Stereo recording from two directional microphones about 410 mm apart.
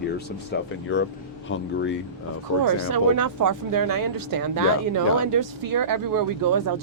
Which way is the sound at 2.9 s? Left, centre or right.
Right.